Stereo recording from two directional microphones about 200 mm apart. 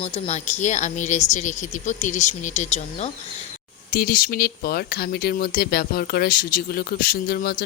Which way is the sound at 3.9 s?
45° left (ahead or behind).